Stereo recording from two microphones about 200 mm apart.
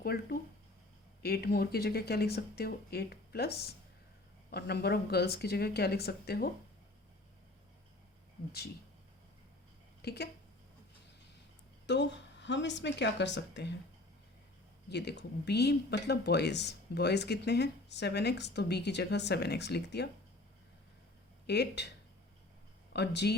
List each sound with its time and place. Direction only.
0.0 s speech: 50° left (ahead or behind)
10.0 s speech: 55° left (ahead or behind)
11.9 s speech: 60° left (ahead or behind)
14.8 s speech: 60° left (ahead or behind)
21.4 s speech: 55° left (ahead or behind)